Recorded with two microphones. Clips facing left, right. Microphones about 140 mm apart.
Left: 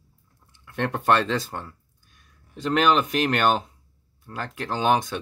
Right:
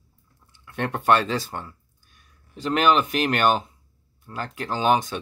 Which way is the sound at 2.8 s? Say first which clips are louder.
Right 1 dB; 5° right (ahead or behind).